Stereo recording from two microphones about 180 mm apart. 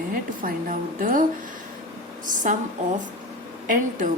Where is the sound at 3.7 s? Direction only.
45° right (ahead or behind).